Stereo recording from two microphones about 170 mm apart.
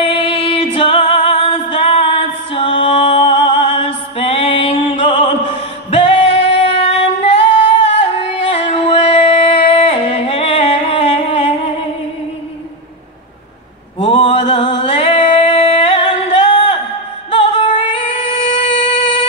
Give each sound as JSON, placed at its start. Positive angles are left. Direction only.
{"t": 0.0, "sound": "female singing", "side_deg": 30}
{"t": 13.9, "sound": "music", "side_deg": 35}
{"t": 18.1, "sound": "music", "side_deg": 40}